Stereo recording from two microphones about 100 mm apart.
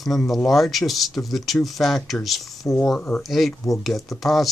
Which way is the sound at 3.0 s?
15° left (ahead or behind).